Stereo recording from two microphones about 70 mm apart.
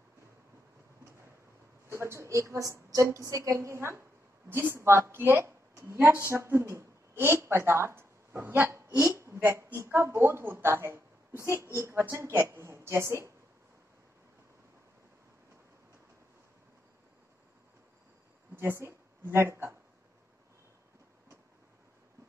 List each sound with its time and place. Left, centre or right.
1.9 s a woman's voice: right
9.2 s a sound: right
9.8 s a woman's voice: right
18.6 s a woman's voice: right